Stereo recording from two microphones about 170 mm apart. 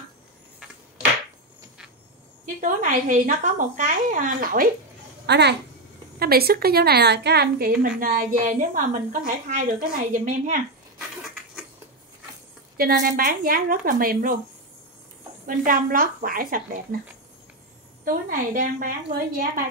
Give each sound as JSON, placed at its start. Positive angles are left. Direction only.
{"t": 2.6, "sound": "a woman's voice", "side_deg": -50}
{"t": 5.2, "sound": "a child's voice", "side_deg": -80}
{"t": 6.1, "sound": "a woman's voice", "side_deg": -65}
{"t": 11.0, "sound": "a sound", "side_deg": -5}
{"t": 12.7, "sound": "a woman's voice", "side_deg": -60}
{"t": 15.4, "sound": "a woman's voice", "side_deg": -55}
{"t": 18.0, "sound": "a woman's voice", "side_deg": -55}